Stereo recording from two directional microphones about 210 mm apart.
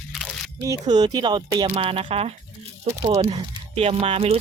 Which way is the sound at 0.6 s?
15° right (ahead or behind).